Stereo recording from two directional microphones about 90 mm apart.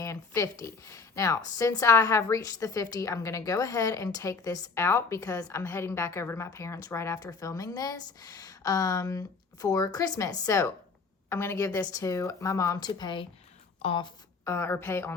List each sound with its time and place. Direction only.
0.0 s a woman's voice: 35° left (ahead or behind)
7.2 s a woman's voice: 45° left (ahead or behind)
12.9 s speech: 60° left (ahead or behind)
13.8 s speech: 75° left (ahead or behind)
14.4 s a woman's voice: 30° left (ahead or behind)